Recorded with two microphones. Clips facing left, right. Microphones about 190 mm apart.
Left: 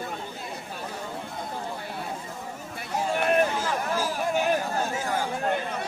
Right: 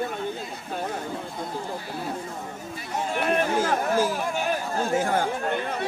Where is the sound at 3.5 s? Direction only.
55° right (ahead or behind).